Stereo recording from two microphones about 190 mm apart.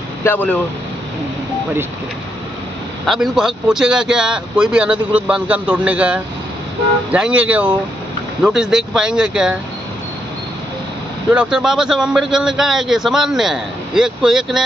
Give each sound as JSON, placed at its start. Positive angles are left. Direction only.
{"t": 0.2, "sound": "speech", "side_deg": 10}
{"t": 3.1, "sound": "a man's voice", "side_deg": 0}
{"t": 11.2, "sound": "a man's voice", "side_deg": -5}